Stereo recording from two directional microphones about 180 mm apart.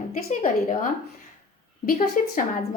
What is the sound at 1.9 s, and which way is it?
Speech, 50° left (ahead or behind).